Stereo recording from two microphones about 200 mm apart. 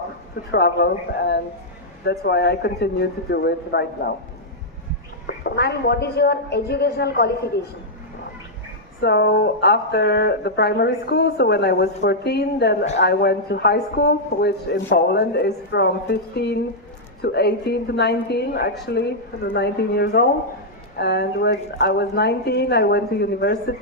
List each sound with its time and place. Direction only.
0.5 s speech: 55° left (ahead or behind)
5.2 s a woman's voice: 55° left (ahead or behind)
9.0 s a woman's voice: 55° left (ahead or behind)